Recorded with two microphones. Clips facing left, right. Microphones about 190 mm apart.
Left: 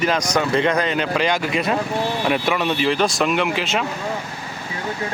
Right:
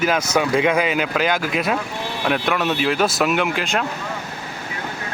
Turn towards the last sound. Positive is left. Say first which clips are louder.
# even
turn(degrees=0)  # may be behind; listen again after turning